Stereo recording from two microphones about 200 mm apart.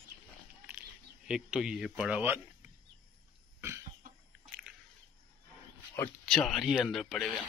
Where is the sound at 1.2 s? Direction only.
5° right (ahead or behind).